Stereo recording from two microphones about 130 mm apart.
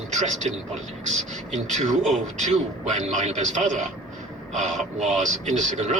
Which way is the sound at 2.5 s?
65° right (ahead or behind).